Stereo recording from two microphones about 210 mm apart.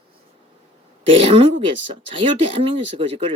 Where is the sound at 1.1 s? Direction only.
25° right (ahead or behind).